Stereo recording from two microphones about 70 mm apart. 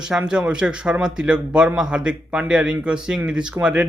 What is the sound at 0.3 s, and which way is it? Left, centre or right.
Speech, centre.